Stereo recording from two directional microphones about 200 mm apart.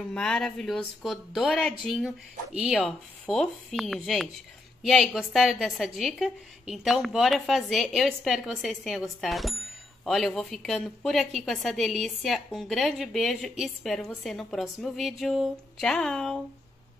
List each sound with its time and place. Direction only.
0.1 s a woman's voice: 5° left (ahead or behind)